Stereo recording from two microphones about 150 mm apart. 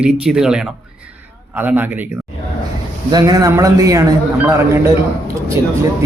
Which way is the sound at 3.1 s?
25° right (ahead or behind).